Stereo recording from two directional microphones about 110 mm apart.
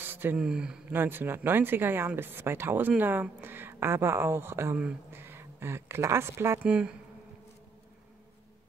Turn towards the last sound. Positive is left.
turn(degrees=-10)  # may be behind; listen again after turning